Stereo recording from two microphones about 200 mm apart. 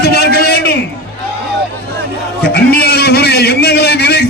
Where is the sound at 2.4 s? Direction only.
50° left (ahead or behind).